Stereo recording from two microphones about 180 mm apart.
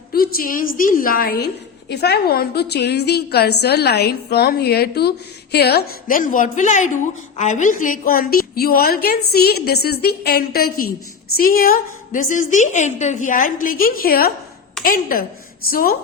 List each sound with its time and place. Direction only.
0.1 s a woman's voice: 55° left (ahead or behind)